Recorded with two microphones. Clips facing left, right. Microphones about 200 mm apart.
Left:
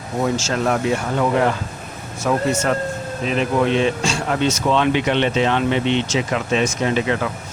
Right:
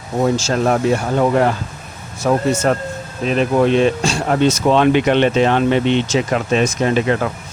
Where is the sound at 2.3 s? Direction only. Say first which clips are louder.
Right 3 dB; 35° right (ahead or behind).